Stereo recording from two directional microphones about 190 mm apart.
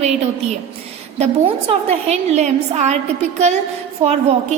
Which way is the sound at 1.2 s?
30° right (ahead or behind).